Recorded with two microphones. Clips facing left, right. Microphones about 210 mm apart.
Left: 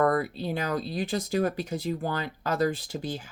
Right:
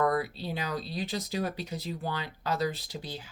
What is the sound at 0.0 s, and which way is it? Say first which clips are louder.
Speech: left 3 dB; 50° left (ahead or behind).